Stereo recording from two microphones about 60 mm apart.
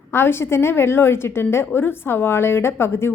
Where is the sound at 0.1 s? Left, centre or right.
Left.